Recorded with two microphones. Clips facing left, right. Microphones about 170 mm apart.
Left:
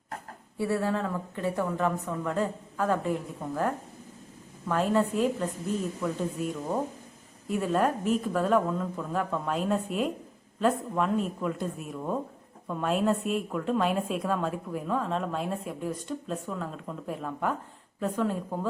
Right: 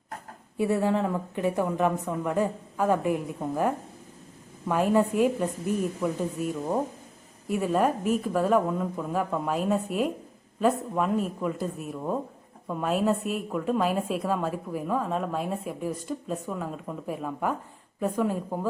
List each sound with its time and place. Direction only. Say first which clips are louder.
0.5 s a woman's voice: right 3 dB; 20° right (ahead or behind)